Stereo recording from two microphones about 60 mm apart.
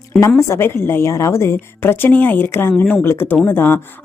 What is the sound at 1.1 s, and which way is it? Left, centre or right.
Speech, left.